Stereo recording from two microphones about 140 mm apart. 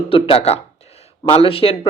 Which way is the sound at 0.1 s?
45° left (ahead or behind).